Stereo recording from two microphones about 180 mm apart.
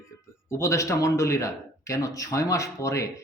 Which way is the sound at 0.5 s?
15° left (ahead or behind).